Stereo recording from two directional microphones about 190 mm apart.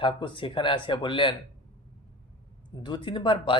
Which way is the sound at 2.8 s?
25° left (ahead or behind).